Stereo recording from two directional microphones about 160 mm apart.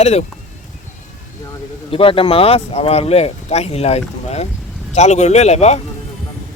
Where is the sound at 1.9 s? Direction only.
35° left (ahead or behind).